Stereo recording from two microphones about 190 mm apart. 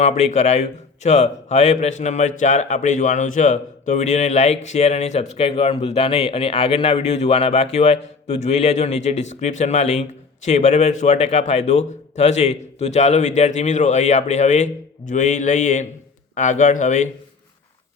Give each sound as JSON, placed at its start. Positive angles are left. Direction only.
{"t": 0.0, "sound": "a man's voice", "side_deg": 35}